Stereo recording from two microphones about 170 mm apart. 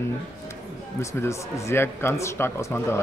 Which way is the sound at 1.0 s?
15° left (ahead or behind).